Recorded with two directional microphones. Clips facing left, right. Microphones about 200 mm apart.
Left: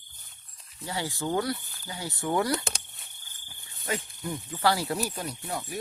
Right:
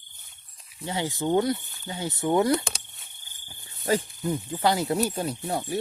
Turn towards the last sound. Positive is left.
turn(degrees=-30)  # may be behind; listen again after turning